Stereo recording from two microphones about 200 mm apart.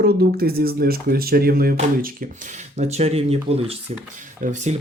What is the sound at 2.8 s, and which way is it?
Speech, 35° right (ahead or behind).